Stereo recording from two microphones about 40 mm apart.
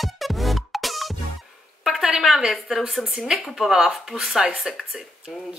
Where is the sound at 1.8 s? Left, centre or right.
Centre.